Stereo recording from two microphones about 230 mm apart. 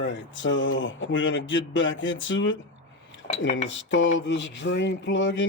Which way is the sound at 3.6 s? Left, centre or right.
Left.